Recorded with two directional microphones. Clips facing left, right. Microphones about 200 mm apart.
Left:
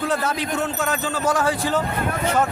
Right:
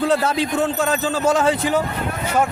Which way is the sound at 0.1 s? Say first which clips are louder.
Right 4 dB; 30° right (ahead or behind).